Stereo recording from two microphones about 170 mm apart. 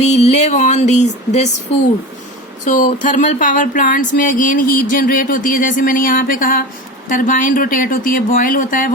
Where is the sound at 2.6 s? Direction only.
50° left (ahead or behind).